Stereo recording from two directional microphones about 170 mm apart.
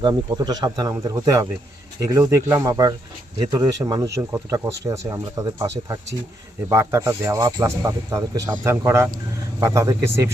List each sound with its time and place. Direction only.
0.0 s a man's voice: 25° right (ahead or behind)